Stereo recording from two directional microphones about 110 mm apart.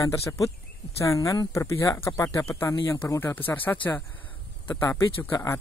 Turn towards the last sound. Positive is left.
turn(degrees=25)  # may be behind; listen again after turning